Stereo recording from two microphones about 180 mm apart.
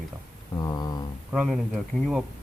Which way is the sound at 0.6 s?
20° left (ahead or behind).